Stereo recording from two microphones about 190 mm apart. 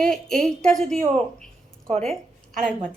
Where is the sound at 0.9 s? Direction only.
35° right (ahead or behind).